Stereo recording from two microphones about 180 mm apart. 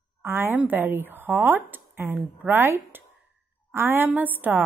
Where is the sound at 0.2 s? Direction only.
10° right (ahead or behind).